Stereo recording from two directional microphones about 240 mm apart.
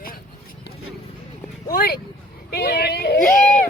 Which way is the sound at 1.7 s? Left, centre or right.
Left.